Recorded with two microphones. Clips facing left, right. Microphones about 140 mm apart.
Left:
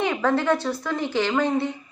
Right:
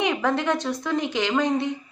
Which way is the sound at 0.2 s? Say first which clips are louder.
Left 2 dB; 15° right (ahead or behind).